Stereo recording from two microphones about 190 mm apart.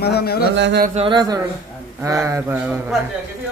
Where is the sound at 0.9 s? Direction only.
25° right (ahead or behind); by 2.8 s 10° right (ahead or behind).